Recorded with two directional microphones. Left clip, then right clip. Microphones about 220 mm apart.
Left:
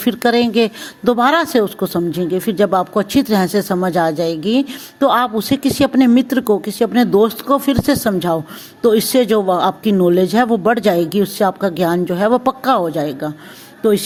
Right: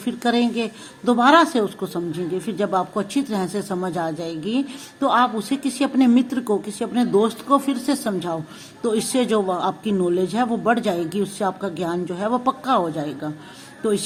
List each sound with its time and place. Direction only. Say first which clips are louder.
0.0 s a woman's voice: left 7 dB; 35° left (ahead or behind)